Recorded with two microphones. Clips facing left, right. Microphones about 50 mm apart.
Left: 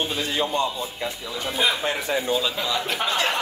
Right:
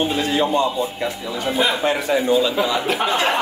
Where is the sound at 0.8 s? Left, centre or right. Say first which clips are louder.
Right 7 dB; right.